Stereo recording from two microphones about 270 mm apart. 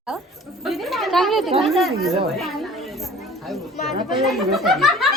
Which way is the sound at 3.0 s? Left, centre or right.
Centre.